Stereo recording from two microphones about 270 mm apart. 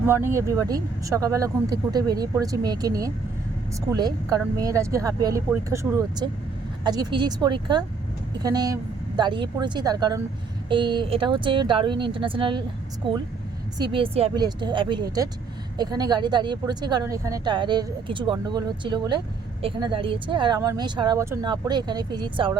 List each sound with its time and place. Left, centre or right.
0.0 s speech: centre
13.7 s speech: centre